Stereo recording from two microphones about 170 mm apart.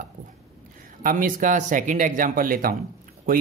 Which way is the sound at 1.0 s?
55° right (ahead or behind).